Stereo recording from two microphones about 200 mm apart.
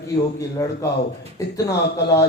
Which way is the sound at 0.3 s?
15° left (ahead or behind).